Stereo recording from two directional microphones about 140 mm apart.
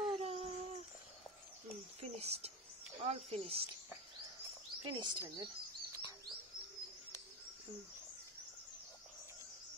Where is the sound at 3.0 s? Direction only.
45° right (ahead or behind).